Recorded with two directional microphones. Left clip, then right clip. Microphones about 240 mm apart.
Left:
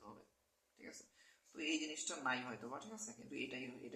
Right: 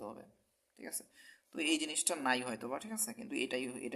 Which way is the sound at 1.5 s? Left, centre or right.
Right.